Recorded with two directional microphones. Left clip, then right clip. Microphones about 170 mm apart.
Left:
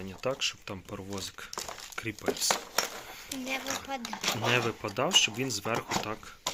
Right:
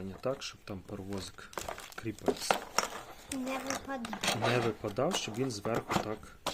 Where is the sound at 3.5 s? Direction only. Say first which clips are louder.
Left 4 dB; 55° right (ahead or behind).